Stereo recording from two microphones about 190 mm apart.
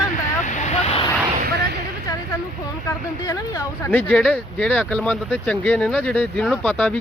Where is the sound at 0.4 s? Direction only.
40° left (ahead or behind).